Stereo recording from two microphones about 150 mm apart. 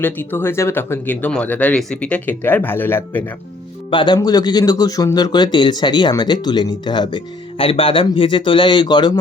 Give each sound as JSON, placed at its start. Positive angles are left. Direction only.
{"t": 0.0, "sound": "speech", "side_deg": 15}
{"t": 3.9, "sound": "speech", "side_deg": 30}